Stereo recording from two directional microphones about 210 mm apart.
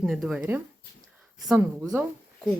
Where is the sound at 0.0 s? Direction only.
Centre (ahead or behind).